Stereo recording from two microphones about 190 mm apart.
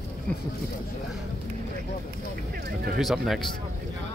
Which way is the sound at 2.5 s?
55° right (ahead or behind).